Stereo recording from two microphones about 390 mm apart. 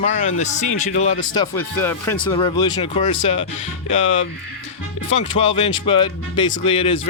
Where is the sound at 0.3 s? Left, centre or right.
Centre.